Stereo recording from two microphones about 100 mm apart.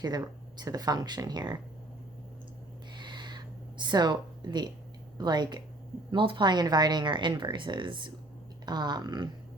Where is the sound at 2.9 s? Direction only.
50° right (ahead or behind).